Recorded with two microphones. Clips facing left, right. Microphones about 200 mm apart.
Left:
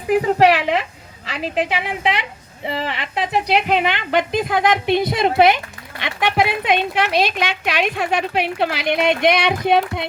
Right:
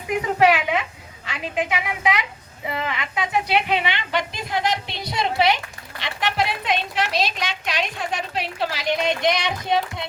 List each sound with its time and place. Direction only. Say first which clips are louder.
0.1 s a woman's voice: left 4 dB; 35° left (ahead or behind); by 10.1 s 60° left (ahead or behind)